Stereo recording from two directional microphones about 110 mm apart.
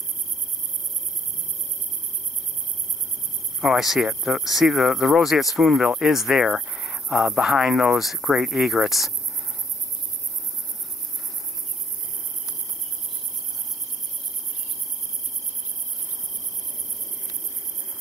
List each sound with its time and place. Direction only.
3.6 s speech: centre (ahead or behind)